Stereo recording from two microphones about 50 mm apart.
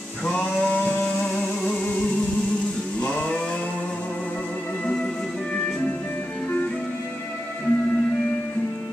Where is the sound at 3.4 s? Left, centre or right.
Centre.